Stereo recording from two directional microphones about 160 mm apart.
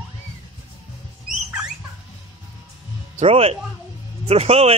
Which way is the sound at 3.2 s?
35° right (ahead or behind).